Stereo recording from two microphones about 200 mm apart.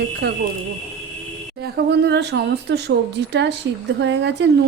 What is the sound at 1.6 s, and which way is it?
Speech, 55° right (ahead or behind).